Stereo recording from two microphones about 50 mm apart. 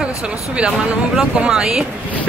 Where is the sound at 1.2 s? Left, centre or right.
Centre.